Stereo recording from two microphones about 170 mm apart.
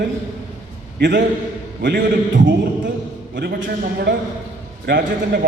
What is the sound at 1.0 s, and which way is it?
Speech, 90° right.